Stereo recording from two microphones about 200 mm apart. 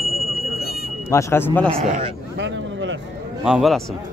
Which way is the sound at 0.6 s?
50° left (ahead or behind).